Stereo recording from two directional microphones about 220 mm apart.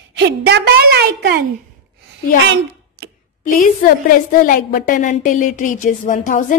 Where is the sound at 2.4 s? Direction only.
55° right (ahead or behind).